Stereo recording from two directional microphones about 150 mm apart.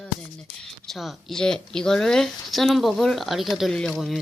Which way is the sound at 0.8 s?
Centre (ahead or behind).